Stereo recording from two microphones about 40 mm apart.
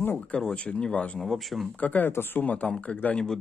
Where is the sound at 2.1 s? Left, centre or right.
Left.